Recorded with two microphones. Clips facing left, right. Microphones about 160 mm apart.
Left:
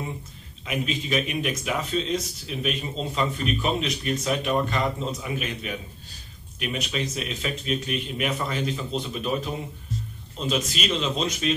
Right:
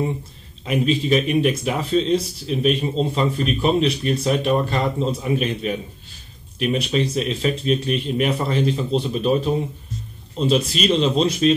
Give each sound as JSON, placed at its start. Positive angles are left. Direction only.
{"t": 0.7, "sound": "speech", "side_deg": -30}